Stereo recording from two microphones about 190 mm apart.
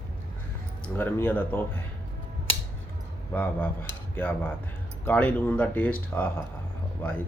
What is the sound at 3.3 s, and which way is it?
Speech, 10° left (ahead or behind).